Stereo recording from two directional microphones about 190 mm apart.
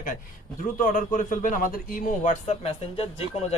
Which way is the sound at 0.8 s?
45° left (ahead or behind).